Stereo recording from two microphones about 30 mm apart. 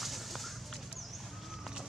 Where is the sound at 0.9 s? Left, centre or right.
Centre.